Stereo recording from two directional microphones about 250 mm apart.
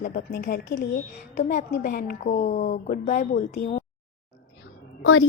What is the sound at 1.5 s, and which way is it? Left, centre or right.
A woman's voice, left.